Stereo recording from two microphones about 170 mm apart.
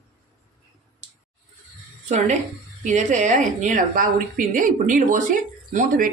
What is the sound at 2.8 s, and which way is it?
A woman's voice, 45° right (ahead or behind).